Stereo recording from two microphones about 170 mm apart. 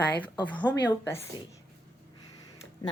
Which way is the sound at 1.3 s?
25° left (ahead or behind).